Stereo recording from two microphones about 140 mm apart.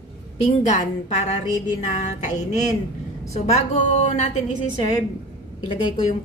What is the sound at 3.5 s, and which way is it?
Speech, 55° left (ahead or behind).